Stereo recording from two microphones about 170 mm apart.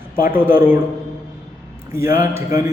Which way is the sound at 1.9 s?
15° right (ahead or behind).